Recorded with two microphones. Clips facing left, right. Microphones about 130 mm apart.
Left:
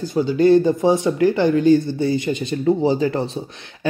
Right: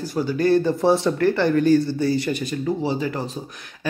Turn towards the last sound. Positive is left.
turn(degrees=30)  # may be behind; listen again after turning